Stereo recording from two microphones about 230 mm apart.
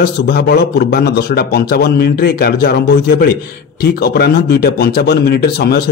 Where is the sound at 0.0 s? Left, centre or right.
Left.